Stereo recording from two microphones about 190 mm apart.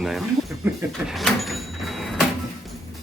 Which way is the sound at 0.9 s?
Centre (ahead or behind).